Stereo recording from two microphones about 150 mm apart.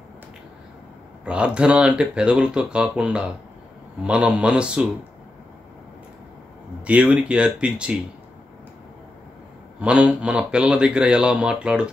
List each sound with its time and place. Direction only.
1.2 s speech: 5° right (ahead or behind)
6.8 s speech: 10° right (ahead or behind)
9.8 s speech: 10° right (ahead or behind)